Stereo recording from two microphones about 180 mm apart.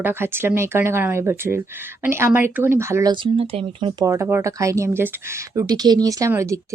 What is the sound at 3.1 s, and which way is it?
Speech, 30° right (ahead or behind).